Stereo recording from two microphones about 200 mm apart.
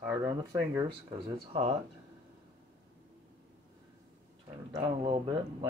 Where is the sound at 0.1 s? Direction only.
15° right (ahead or behind).